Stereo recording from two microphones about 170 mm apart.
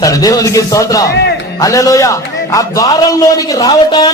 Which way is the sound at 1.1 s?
70° left (ahead or behind).